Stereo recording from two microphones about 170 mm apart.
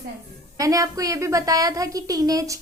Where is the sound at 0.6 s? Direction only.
20° right (ahead or behind).